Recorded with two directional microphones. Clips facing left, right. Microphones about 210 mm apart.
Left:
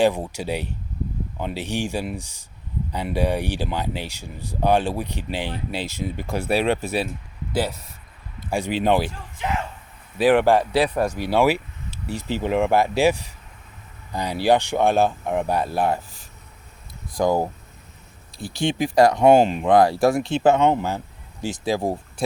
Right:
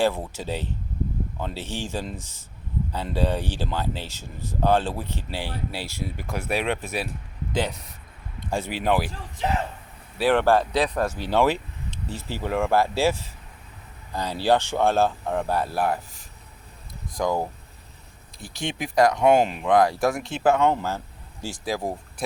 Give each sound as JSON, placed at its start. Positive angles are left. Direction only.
{"t": 0.0, "sound": "speech", "side_deg": 15}
{"t": 7.5, "sound": "speech", "side_deg": 5}
{"t": 8.7, "sound": "speech", "side_deg": 25}
{"t": 9.4, "sound": "speech", "side_deg": -35}
{"t": 10.2, "sound": "speech", "side_deg": 15}